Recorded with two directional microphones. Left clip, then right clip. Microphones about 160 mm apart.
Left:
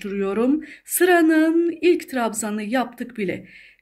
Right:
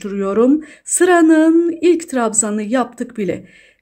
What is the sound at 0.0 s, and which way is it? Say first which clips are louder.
Speech: right 7 dB; 45° right (ahead or behind).